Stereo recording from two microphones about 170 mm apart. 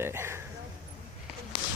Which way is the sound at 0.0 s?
15° right (ahead or behind).